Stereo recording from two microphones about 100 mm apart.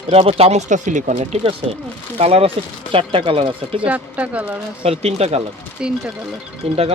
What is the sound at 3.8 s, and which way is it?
Speech, 15° right (ahead or behind).